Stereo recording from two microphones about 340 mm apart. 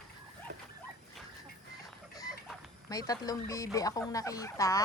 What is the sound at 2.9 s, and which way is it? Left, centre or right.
Speech, centre.